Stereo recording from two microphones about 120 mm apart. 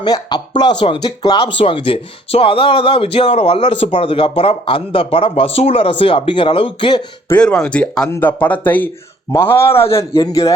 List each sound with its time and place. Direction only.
0.0 s speech: 35° left (ahead or behind)
7.3 s a man's voice: 10° left (ahead or behind); by 10.5 s 30° left (ahead or behind)